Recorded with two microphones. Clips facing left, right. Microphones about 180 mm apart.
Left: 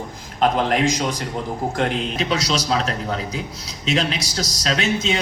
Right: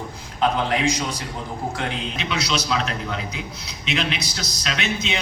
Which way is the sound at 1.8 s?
45° left (ahead or behind).